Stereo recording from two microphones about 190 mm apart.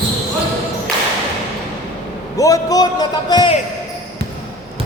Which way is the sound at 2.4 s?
20° left (ahead or behind).